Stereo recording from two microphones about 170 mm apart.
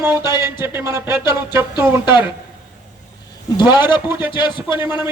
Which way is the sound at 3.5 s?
25° left (ahead or behind).